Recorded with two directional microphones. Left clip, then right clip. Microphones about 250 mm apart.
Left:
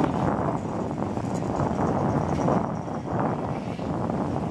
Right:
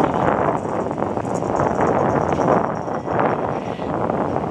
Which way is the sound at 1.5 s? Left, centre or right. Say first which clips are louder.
Right 9 dB; left.